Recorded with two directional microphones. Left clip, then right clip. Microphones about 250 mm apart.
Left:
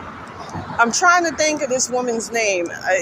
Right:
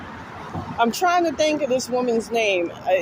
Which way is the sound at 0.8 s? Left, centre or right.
Centre.